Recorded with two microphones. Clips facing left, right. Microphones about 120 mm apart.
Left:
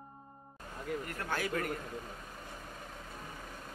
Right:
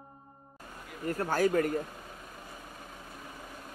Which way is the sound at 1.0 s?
40° right (ahead or behind).